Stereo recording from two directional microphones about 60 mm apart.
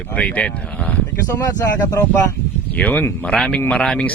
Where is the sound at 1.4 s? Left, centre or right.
Left.